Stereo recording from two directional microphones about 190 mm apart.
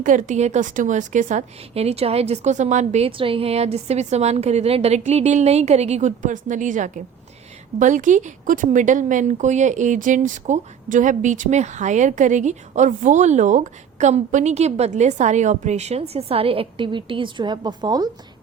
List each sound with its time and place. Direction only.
0.0 s a woman's voice: 40° right (ahead or behind); by 18.1 s 20° right (ahead or behind)